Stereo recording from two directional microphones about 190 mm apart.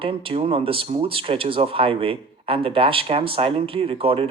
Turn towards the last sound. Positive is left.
turn(degrees=-30)  # may be behind; listen again after turning